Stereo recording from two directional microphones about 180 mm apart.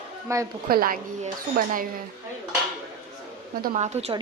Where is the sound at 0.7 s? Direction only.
55° right (ahead or behind).